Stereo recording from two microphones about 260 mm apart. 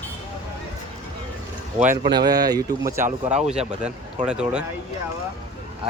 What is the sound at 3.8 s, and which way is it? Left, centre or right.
Speech, centre.